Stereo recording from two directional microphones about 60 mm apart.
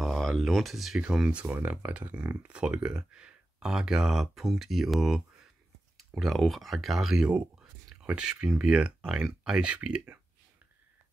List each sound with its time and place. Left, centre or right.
0.0 s speech: centre
0.9 s speech: centre
1.4 s speech: right